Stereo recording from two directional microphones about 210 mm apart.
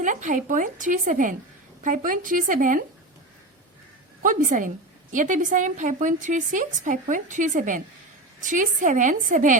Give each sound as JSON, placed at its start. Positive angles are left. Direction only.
{"t": 0.0, "sound": "a woman's voice", "side_deg": -35}
{"t": 4.2, "sound": "a woman's voice", "side_deg": -40}